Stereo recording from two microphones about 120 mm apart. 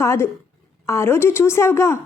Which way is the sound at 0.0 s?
20° left (ahead or behind).